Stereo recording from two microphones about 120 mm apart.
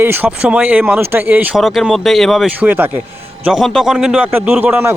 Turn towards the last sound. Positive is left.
turn(degrees=-15)  # may be behind; listen again after turning